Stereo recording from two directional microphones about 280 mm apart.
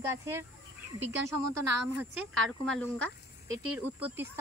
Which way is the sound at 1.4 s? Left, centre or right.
Right.